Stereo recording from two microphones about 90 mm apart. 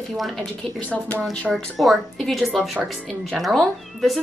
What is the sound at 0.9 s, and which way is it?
Speech, 15° left (ahead or behind).